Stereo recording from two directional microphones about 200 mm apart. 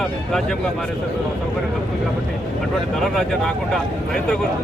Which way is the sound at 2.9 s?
Centre (ahead or behind).